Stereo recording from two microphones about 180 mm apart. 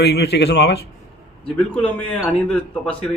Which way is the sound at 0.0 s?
70° left (ahead or behind).